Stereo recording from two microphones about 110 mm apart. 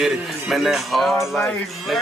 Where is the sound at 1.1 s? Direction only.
20° left (ahead or behind).